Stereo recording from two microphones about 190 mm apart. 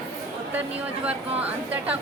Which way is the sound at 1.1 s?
10° right (ahead or behind).